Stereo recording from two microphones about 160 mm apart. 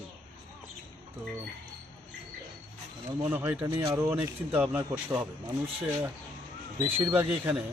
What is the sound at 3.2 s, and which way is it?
Speech, 10° right (ahead or behind).